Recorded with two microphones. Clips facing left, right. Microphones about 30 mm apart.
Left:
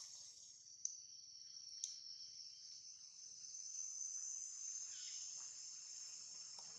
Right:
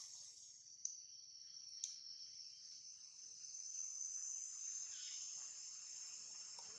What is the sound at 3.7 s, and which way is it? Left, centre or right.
Cricket, centre.